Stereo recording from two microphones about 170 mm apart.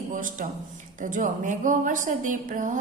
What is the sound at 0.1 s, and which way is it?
A man's voice, 50° right (ahead or behind).